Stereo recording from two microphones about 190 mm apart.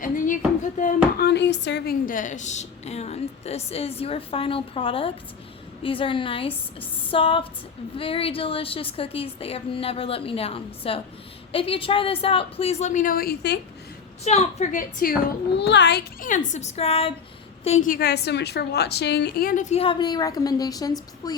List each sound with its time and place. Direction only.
0.8 s a sound: 45° left (ahead or behind)
1.3 s a woman's voice: 65° left (ahead or behind)
14.3 s a woman's voice: 35° left (ahead or behind)
15.5 s a woman's voice: 65° left (ahead or behind); by 21.3 s 20° left (ahead or behind)